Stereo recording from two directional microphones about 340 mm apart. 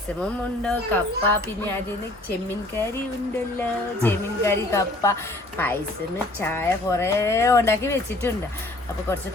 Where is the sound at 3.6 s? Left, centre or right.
Centre.